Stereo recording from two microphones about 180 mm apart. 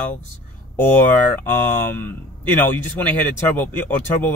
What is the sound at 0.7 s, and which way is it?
Speech, 10° left (ahead or behind).